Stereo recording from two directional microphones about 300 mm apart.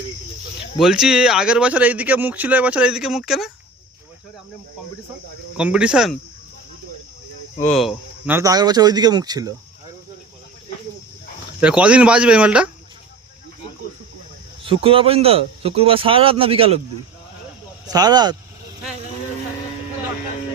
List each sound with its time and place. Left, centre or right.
0.8 s speech: centre
5.5 s speech: centre
7.7 s a man's voice: centre
11.6 s speech: centre
14.6 s speech: centre
17.8 s a man's voice: centre